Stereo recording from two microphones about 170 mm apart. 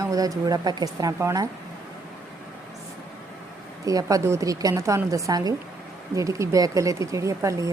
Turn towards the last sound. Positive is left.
turn(degrees=-20)  # may be behind; listen again after turning